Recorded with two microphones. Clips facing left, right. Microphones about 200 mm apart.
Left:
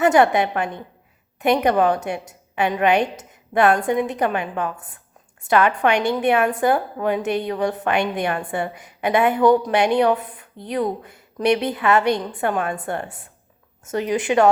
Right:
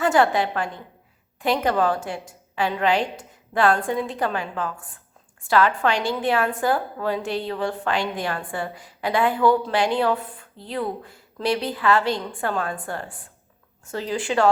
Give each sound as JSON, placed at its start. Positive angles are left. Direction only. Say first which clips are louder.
{"t": 0.0, "sound": "a woman's voice", "louder": "left 4 dB", "side_deg": 20}